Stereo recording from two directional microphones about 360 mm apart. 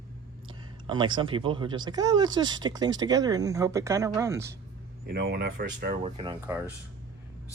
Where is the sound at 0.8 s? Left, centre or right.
Centre.